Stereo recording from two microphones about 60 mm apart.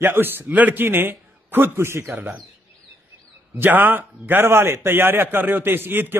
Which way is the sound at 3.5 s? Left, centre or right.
Right.